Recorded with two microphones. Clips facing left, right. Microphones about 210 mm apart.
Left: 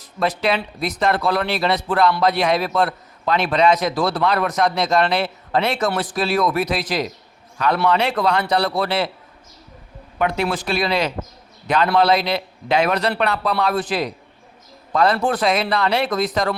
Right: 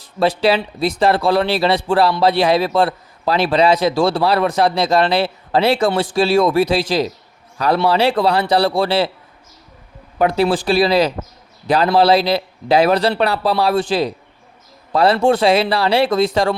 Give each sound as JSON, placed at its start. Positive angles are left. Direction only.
{"t": 0.0, "sound": "a man's voice", "side_deg": -30}
{"t": 10.2, "sound": "a man's voice", "side_deg": -35}